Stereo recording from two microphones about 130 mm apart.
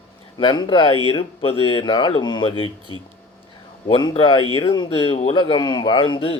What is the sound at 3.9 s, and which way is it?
Speech, 35° left (ahead or behind).